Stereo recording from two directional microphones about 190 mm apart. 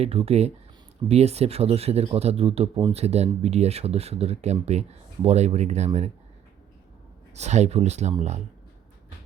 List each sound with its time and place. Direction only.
0.0 s speech: 30° right (ahead or behind)
7.3 s speech: 35° right (ahead or behind)